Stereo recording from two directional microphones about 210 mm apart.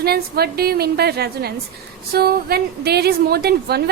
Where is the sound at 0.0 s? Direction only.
50° right (ahead or behind).